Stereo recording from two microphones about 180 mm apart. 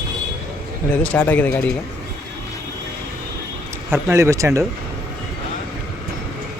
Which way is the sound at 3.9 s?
15° right (ahead or behind).